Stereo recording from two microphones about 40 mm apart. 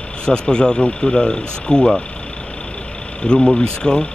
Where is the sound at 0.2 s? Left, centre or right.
Left.